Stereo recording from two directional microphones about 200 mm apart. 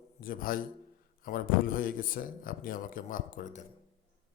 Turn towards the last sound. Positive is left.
turn(degrees=40)  # may be behind; listen again after turning